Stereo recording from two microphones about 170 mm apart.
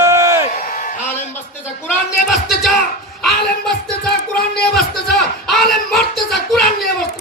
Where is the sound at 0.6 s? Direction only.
55° left (ahead or behind).